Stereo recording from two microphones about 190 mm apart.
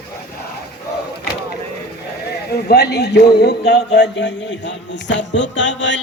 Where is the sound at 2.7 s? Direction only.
60° left (ahead or behind).